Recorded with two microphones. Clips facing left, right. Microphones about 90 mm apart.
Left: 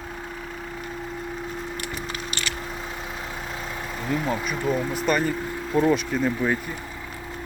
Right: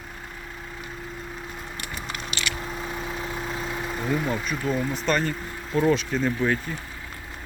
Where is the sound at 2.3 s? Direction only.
40° left (ahead or behind).